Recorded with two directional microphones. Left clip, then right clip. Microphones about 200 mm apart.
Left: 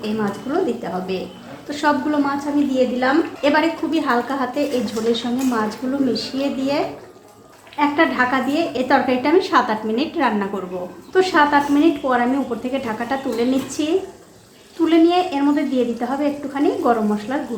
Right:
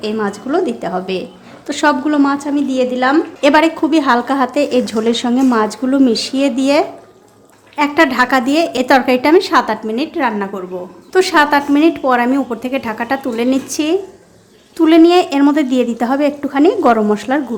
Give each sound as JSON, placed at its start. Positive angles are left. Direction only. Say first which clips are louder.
{"t": 0.0, "sound": "a woman's voice", "louder": "right 5 dB", "side_deg": -45}
{"t": 7.8, "sound": "a woman's voice", "louder": "right 5 dB", "side_deg": -40}
{"t": 11.1, "sound": "a woman's voice", "louder": "right 4 dB", "side_deg": -35}
{"t": 14.8, "sound": "a woman's voice", "louder": "right 7 dB", "side_deg": -40}